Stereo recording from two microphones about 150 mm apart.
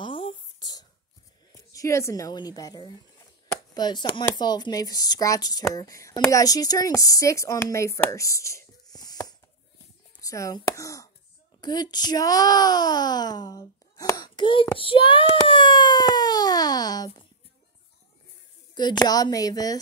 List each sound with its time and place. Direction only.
0.0 s a sound: 35° left (ahead or behind)
1.5 s a woman's voice: 20° left (ahead or behind)
18.8 s speech: 30° left (ahead or behind)